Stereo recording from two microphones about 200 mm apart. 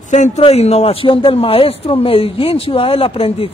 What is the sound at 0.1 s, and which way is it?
A man's voice, 35° left (ahead or behind).